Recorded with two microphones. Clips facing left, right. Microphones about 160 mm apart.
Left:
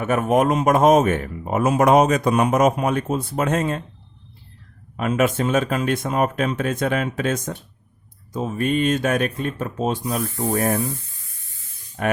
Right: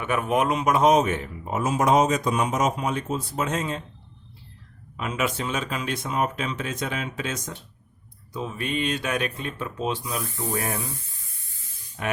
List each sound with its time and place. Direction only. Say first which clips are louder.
0.0 s speech: left 5 dB; 45° left (ahead or behind)
4.9 s speech: left 7 dB; 50° left (ahead or behind)
12.0 s speech: left 6 dB; 50° left (ahead or behind)